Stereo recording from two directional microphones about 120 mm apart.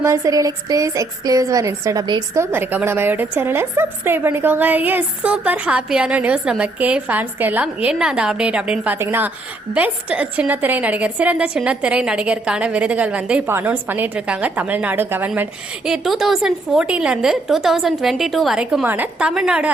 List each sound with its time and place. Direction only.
0.0 s a woman's voice: 25° right (ahead or behind)
15.4 s a woman's voice: 5° right (ahead or behind)